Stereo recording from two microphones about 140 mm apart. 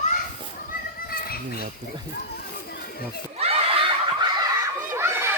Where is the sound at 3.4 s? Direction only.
45° right (ahead or behind).